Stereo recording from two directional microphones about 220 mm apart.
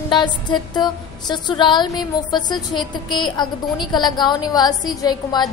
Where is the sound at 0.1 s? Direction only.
20° left (ahead or behind).